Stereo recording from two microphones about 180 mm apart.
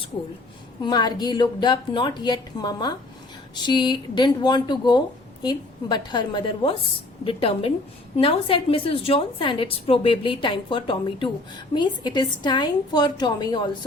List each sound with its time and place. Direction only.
0.8 s a woman's voice: 25° left (ahead or behind)